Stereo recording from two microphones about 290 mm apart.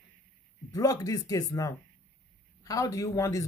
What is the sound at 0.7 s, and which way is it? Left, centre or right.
Speech, centre.